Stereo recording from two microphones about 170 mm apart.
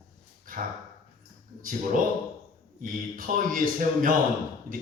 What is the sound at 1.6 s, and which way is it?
Speech, 55° right (ahead or behind).